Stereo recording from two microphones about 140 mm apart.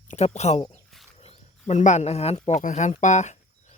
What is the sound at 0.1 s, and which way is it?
Speech, 50° left (ahead or behind).